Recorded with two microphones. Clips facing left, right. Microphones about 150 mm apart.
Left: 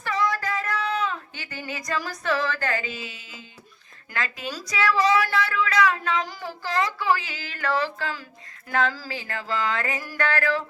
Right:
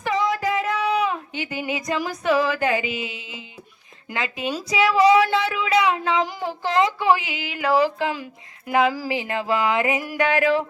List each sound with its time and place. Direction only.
0.0 s music: 20° right (ahead or behind)
0.9 s a sound: 15° right (ahead or behind)
2.3 s speech: 10° right (ahead or behind)